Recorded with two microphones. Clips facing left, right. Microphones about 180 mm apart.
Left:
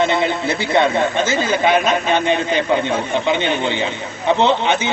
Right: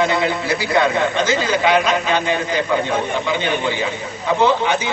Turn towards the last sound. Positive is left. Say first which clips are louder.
# even
turn(degrees=25)  # may be behind; listen again after turning